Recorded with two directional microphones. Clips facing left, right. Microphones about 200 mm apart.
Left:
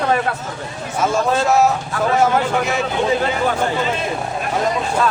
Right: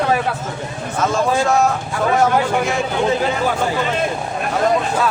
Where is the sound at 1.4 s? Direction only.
5° left (ahead or behind).